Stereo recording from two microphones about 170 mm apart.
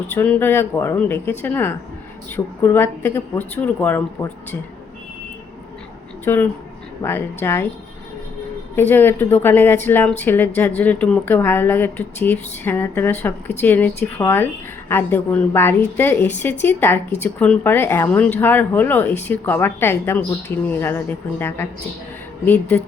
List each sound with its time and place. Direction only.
0.1 s speech: 10° left (ahead or behind)
6.2 s speech: 10° left (ahead or behind)
8.7 s speech: 10° left (ahead or behind)